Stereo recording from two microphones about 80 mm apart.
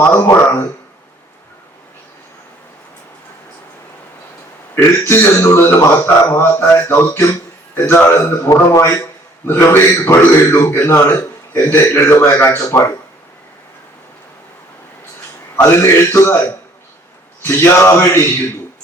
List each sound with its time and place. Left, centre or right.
0.0 s a man's voice: left
4.7 s a man's voice: left
9.5 s a man's voice: left
15.6 s a man's voice: left